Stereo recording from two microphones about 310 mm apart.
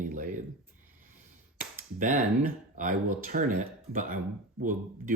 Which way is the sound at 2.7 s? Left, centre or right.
Right.